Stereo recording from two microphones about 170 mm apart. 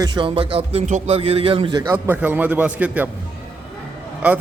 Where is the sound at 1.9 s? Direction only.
10° right (ahead or behind).